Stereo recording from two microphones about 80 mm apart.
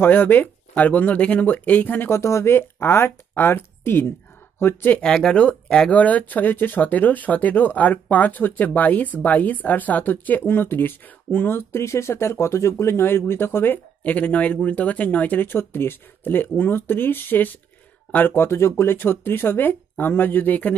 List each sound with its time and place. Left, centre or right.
0.0 s speech: left
4.9 s speech: centre